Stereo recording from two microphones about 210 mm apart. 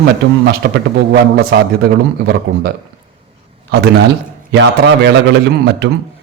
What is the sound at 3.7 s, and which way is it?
A man's voice, 50° right (ahead or behind).